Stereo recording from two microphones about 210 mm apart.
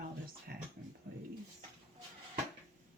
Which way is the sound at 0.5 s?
50° right (ahead or behind).